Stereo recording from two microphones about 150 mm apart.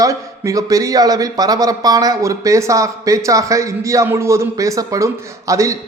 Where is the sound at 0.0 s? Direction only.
20° right (ahead or behind).